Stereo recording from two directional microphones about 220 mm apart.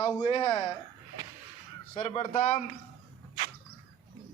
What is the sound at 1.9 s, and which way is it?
Speech, 25° left (ahead or behind).